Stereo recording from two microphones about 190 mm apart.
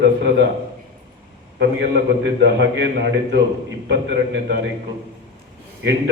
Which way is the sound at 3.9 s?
70° right (ahead or behind).